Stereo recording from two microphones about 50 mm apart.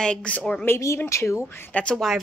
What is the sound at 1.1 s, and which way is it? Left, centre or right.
Speech, left.